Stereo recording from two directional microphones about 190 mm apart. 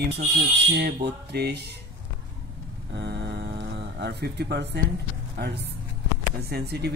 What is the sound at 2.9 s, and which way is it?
Cattle, 65° right (ahead or behind).